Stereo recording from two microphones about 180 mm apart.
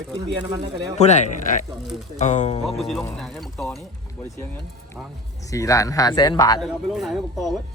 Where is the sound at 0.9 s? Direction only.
40° left (ahead or behind).